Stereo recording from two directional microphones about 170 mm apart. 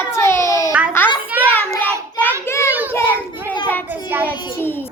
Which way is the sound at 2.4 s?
15° left (ahead or behind).